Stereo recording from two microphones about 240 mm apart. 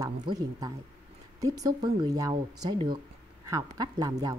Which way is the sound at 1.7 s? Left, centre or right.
Centre.